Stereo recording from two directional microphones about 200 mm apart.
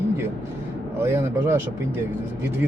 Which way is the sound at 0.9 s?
10° right (ahead or behind).